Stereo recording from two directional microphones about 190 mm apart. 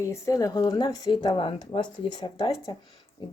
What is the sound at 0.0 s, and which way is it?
A woman's voice, 15° left (ahead or behind).